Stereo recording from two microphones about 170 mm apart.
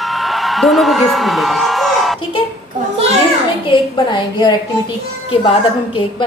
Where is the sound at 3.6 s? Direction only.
30° left (ahead or behind).